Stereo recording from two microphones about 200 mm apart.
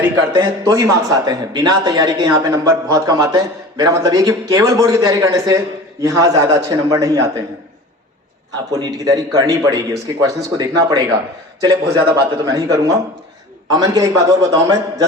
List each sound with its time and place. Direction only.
0.3 s a man's voice: 15° right (ahead or behind)
8.7 s a man's voice: 20° right (ahead or behind)